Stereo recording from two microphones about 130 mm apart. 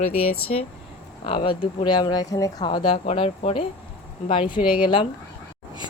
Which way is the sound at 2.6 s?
40° left (ahead or behind).